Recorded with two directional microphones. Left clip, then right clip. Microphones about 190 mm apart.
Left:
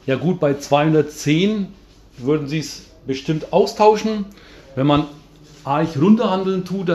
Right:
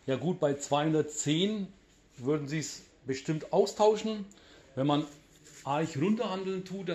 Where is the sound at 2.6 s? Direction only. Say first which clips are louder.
Left 10 dB; 20° right (ahead or behind).